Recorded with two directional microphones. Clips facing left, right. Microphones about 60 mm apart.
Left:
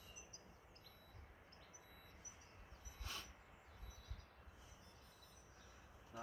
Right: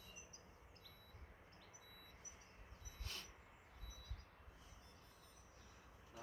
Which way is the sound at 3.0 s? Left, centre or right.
Centre.